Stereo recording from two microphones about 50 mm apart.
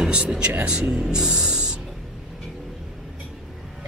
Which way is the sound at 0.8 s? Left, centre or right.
Centre.